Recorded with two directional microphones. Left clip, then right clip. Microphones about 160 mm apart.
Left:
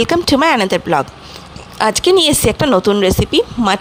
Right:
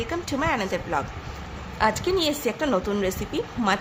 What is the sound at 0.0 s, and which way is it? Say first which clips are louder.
Speech: left 14 dB; 75° left (ahead or behind).